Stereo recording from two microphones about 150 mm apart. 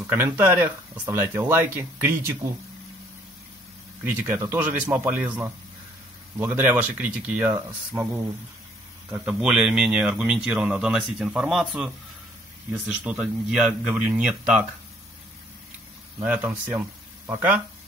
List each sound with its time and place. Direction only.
0.0 s speech: 15° right (ahead or behind)
4.0 s speech: 15° right (ahead or behind)
9.1 s speech: 5° right (ahead or behind)
16.2 s speech: 10° right (ahead or behind)